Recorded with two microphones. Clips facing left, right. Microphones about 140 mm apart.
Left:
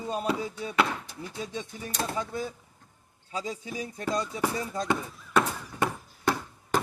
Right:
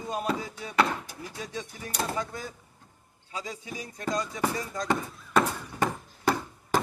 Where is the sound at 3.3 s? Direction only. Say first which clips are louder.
Left 3 dB; 35° left (ahead or behind).